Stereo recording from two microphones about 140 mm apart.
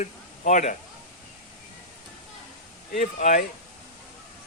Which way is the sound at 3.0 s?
65° left (ahead or behind).